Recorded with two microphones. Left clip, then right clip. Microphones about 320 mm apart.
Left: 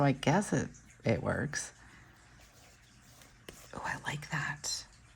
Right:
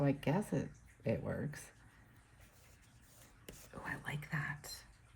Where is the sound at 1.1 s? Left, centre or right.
Left.